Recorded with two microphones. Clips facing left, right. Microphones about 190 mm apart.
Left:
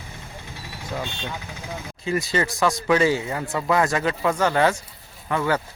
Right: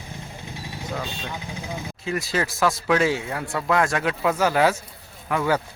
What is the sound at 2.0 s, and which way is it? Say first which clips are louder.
Speech: left 2 dB; centre (ahead or behind).